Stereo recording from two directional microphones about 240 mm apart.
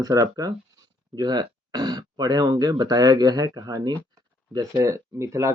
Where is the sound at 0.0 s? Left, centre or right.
Centre.